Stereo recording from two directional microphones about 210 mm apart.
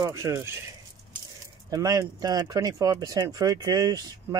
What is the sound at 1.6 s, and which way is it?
Speech, 15° right (ahead or behind).